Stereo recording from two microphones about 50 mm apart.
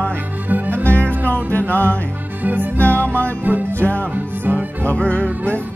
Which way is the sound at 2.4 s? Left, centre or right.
Right.